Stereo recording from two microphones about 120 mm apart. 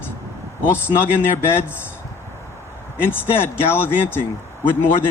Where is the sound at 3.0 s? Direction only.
20° left (ahead or behind).